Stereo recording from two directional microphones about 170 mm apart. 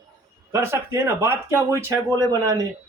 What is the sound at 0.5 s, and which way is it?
Speech, 15° right (ahead or behind).